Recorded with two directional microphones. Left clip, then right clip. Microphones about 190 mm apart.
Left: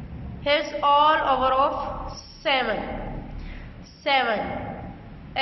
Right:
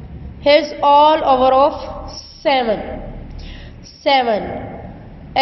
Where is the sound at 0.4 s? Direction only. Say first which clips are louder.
Right 10 dB; 25° right (ahead or behind).